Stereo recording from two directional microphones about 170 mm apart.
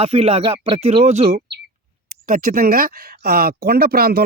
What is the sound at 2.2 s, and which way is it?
Speech, 55° right (ahead or behind).